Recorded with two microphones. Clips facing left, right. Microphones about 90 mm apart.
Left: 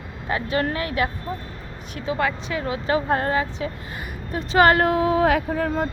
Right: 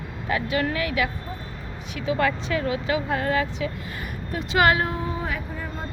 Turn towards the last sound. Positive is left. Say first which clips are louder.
# left 10 dB
turn(degrees=90)